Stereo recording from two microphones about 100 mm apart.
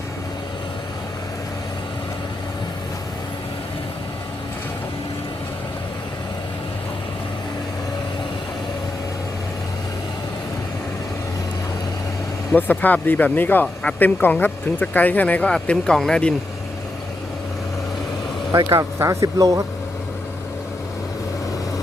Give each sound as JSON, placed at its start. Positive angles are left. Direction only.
{"t": 12.5, "sound": "speech", "side_deg": 20}
{"t": 18.9, "sound": "speech", "side_deg": -30}